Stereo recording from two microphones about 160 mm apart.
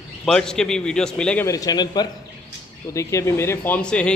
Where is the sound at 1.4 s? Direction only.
20° left (ahead or behind).